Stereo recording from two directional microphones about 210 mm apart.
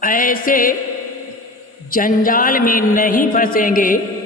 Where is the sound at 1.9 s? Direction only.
40° left (ahead or behind).